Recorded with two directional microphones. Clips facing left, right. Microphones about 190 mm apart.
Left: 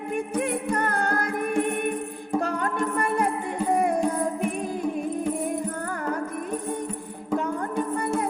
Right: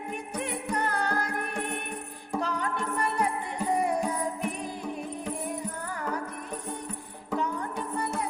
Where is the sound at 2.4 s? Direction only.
50° left (ahead or behind).